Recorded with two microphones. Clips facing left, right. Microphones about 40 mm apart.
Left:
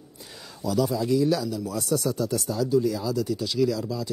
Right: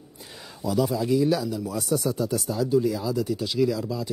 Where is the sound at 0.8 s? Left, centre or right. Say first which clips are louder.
Even; centre.